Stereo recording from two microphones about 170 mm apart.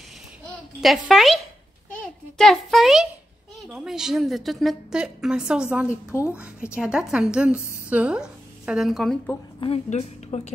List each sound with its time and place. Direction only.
0.7 s a woman's voice: 5° right (ahead or behind)
9.6 s a woman's voice: 40° left (ahead or behind)